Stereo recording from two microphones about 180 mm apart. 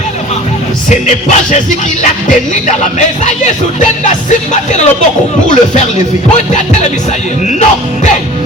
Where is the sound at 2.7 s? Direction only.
40° left (ahead or behind).